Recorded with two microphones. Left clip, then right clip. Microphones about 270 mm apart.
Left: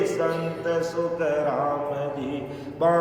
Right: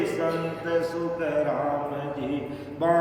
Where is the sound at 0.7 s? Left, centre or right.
Centre.